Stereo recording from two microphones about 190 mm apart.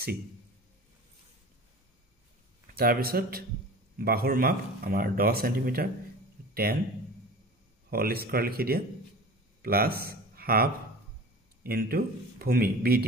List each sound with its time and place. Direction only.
2.7 s speech: 50° right (ahead or behind)
7.9 s speech: 50° right (ahead or behind)